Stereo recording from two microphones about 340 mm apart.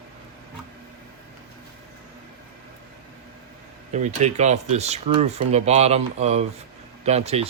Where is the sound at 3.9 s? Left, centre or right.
Right.